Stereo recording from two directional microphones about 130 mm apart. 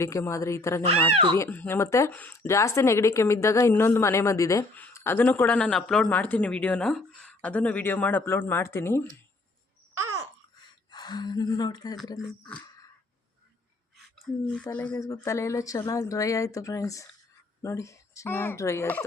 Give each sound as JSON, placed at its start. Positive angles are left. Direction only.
{"t": 0.0, "sound": "speech", "side_deg": 20}
{"t": 1.1, "sound": "speech", "side_deg": -40}
{"t": 1.4, "sound": "speech", "side_deg": 15}
{"t": 10.9, "sound": "speech", "side_deg": 35}
{"t": 14.5, "sound": "speech", "side_deg": 10}
{"t": 14.9, "sound": "speech", "side_deg": 25}